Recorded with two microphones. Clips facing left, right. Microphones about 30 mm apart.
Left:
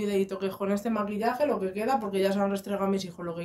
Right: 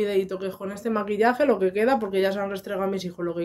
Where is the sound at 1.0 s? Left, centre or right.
Right.